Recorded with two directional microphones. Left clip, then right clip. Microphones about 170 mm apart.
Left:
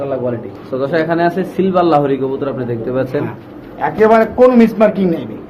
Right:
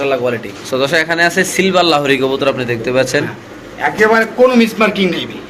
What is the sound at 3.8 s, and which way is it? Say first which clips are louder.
Speech: left 1 dB; 45° left (ahead or behind).